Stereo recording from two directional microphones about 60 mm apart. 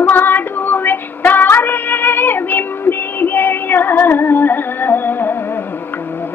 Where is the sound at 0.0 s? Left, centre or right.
Left.